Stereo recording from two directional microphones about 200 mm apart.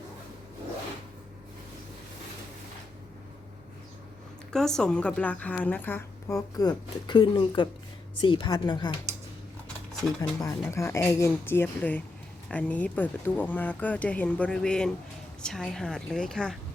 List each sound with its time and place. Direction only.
4.5 s a woman's voice: 5° left (ahead or behind); by 9.0 s 25° left (ahead or behind)
10.2 s a woman's voice: 15° left (ahead or behind)